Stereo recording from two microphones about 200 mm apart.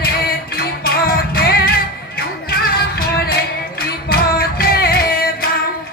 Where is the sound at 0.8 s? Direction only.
50° left (ahead or behind).